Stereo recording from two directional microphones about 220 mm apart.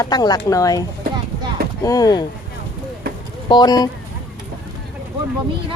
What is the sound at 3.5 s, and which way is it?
Speech, 20° left (ahead or behind).